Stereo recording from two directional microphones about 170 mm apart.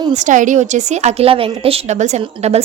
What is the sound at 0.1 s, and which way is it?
A woman's voice, 45° right (ahead or behind).